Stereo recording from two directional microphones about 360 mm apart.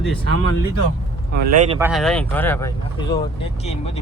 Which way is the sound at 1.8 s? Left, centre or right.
Centre.